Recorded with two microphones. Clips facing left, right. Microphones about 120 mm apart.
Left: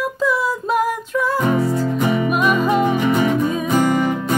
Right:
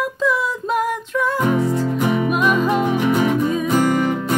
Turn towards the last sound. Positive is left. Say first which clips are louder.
# even
turn(degrees=15)  # may be behind; listen again after turning